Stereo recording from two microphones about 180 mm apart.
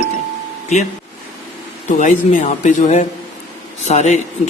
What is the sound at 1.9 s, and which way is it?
Speech, 45° left (ahead or behind).